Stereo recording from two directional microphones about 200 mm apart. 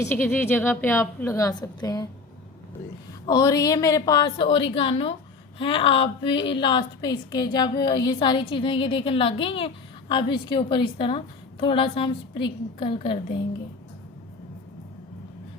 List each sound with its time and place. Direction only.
0.0 s a woman's voice: 10° left (ahead or behind)
3.2 s a woman's voice: 20° left (ahead or behind)